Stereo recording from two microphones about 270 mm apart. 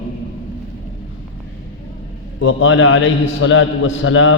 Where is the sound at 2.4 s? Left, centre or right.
Left.